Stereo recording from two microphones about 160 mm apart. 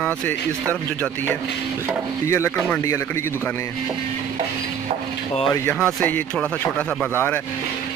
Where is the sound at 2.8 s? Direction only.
20° left (ahead or behind).